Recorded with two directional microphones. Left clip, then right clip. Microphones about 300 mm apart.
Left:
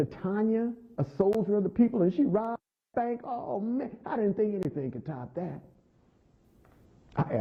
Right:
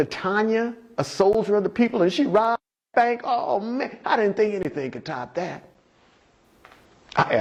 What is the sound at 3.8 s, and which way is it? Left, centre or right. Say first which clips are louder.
A man's voice: right 9 dB; centre.